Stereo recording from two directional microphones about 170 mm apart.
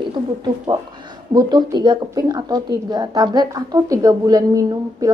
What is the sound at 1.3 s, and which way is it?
A woman's voice, 25° right (ahead or behind).